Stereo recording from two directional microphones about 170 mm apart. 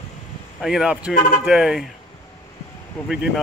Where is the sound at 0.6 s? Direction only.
5° right (ahead or behind).